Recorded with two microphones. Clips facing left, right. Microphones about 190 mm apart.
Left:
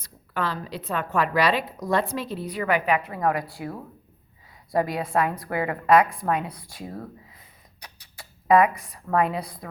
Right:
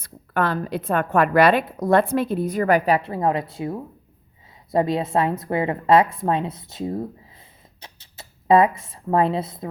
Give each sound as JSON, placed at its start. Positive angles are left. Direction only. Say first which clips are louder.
{"t": 0.0, "sound": "a woman's voice", "louder": "right 6 dB", "side_deg": -55}